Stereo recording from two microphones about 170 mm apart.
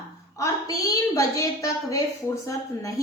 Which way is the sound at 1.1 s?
20° left (ahead or behind).